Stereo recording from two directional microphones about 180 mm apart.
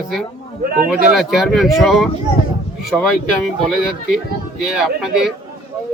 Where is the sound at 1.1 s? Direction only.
Centre (ahead or behind).